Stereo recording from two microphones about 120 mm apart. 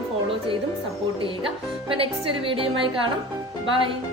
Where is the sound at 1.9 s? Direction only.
50° right (ahead or behind).